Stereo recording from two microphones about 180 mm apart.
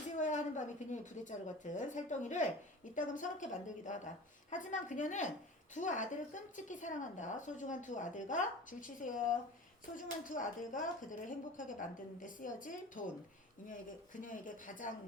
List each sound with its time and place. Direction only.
0.2 s a woman's voice: 45° left (ahead or behind)